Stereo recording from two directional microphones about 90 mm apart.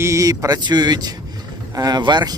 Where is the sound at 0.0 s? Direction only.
35° right (ahead or behind).